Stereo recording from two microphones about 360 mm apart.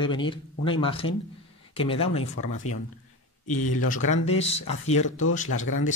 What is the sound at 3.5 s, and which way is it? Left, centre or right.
Speech, left.